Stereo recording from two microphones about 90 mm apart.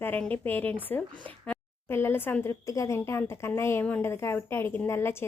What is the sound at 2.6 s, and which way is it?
A woman's voice, 35° left (ahead or behind).